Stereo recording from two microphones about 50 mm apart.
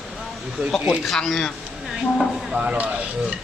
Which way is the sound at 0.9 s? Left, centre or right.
Centre.